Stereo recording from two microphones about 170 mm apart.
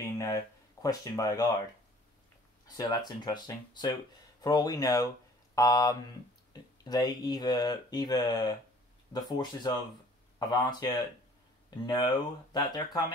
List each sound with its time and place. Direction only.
0.0 s a sound: 20° left (ahead or behind)
0.8 s speech: 20° left (ahead or behind)
2.6 s speech: 20° left (ahead or behind)